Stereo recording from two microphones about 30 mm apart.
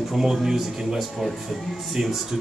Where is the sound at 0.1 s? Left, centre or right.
Centre.